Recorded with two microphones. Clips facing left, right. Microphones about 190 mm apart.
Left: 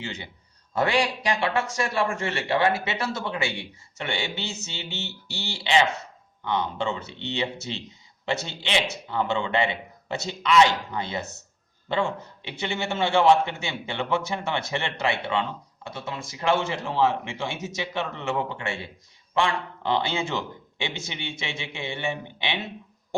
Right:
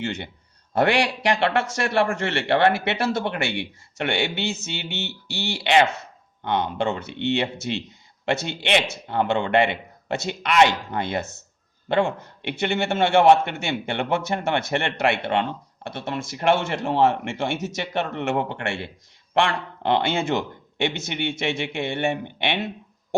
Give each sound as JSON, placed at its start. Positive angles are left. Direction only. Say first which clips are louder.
{"t": 0.0, "sound": "a man's voice", "louder": "right 7 dB", "side_deg": -65}